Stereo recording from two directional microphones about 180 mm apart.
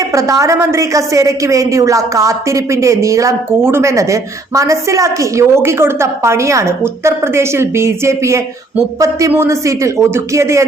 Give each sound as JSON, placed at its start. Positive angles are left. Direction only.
{"t": 0.0, "sound": "a woman's voice", "side_deg": -15}